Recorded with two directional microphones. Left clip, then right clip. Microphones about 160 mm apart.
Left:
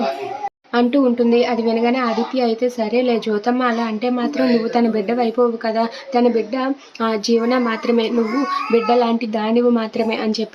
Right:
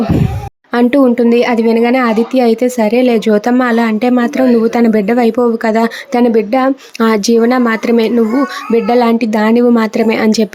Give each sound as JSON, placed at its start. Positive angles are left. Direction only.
{"t": 0.7, "sound": "speech", "side_deg": -50}